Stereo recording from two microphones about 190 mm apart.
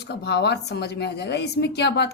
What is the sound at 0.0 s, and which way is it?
Speech, 60° left (ahead or behind).